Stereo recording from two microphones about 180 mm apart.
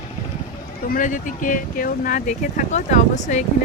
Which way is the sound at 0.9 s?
45° left (ahead or behind).